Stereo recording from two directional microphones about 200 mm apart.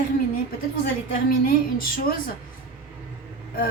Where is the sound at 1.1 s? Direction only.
45° left (ahead or behind).